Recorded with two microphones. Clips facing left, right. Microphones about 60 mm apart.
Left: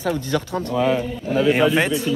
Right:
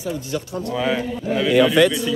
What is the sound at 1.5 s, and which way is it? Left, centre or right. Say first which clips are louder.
Speech: right 4 dB; left.